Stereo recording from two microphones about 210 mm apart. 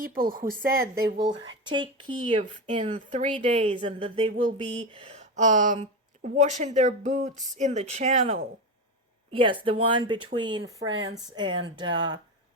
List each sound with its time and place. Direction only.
0.0 s speech: 45° right (ahead or behind); by 1.5 s 60° right (ahead or behind)
1.6 s speech: 20° right (ahead or behind)